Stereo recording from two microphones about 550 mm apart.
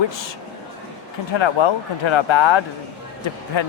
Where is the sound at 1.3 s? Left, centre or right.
Left.